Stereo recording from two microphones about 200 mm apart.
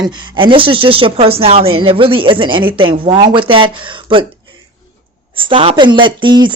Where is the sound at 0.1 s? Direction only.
20° right (ahead or behind).